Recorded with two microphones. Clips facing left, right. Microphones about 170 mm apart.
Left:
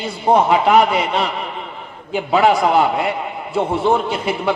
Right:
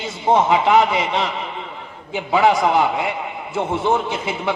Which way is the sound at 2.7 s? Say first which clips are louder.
Left 2 dB; 20° right (ahead or behind).